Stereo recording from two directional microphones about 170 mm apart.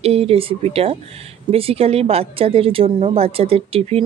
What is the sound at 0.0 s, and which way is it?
Speech, 35° right (ahead or behind).